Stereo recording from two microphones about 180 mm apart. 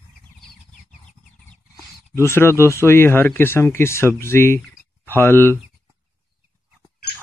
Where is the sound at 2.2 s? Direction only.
15° left (ahead or behind).